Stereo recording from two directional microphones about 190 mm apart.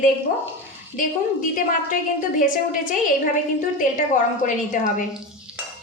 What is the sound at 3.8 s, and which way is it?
A woman's voice, 40° left (ahead or behind).